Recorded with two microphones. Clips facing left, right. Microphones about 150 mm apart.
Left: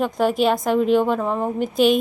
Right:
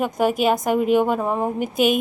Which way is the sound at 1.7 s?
50° right (ahead or behind).